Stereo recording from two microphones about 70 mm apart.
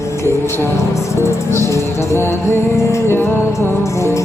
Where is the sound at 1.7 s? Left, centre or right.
Left.